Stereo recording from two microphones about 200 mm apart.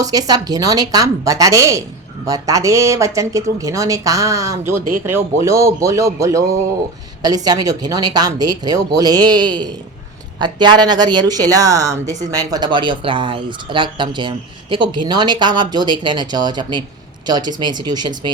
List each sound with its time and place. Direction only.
0.0 s speech: 20° right (ahead or behind)